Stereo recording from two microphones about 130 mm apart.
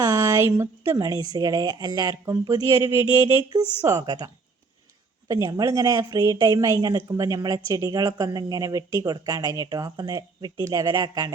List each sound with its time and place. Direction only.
0.0 s speech: 30° right (ahead or behind)
5.3 s speech: 30° right (ahead or behind)